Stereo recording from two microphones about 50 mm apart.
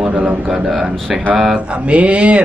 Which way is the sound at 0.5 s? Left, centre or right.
Centre.